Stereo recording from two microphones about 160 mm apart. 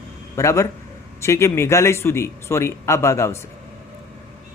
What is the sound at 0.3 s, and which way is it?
A man's voice, 20° left (ahead or behind).